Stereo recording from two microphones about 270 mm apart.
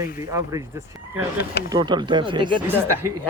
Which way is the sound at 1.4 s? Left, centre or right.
Left.